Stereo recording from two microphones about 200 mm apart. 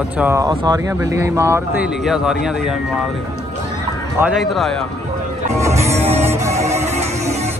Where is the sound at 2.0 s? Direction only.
5° right (ahead or behind).